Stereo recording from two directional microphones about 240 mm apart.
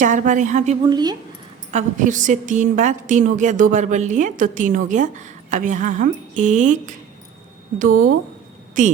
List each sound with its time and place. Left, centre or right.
0.0 s a woman's voice: right; by 1.1 s centre
1.7 s a woman's voice: right